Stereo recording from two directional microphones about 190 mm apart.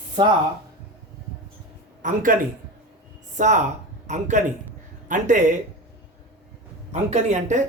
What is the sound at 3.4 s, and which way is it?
Speech, 40° right (ahead or behind).